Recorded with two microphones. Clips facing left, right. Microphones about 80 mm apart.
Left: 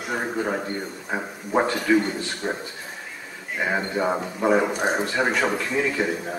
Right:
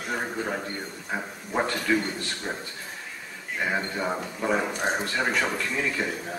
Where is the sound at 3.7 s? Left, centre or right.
Centre.